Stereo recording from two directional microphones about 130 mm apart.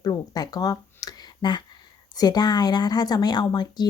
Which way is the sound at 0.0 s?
30° left (ahead or behind).